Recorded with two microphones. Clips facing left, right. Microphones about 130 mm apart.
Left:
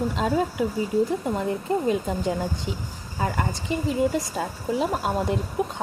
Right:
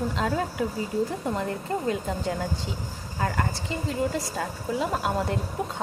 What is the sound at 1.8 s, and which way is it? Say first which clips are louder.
Speech: left 3 dB; 20° left (ahead or behind).